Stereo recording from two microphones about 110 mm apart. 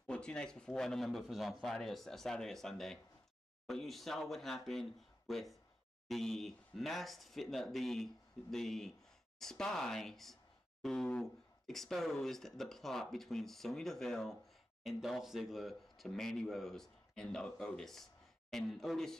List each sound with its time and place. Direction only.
0.0 s speech: 10° left (ahead or behind)